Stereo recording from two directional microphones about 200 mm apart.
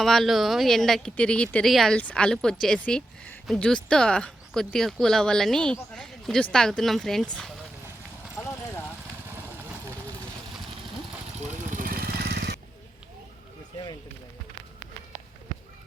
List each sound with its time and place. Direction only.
0.0 s speech: centre (ahead or behind)
8.4 s clip-clop: 10° left (ahead or behind)
11.7 s vehicle: 45° right (ahead or behind)